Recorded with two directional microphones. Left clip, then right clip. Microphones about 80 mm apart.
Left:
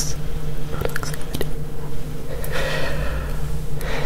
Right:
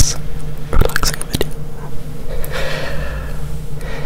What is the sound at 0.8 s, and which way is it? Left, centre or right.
Biting, right.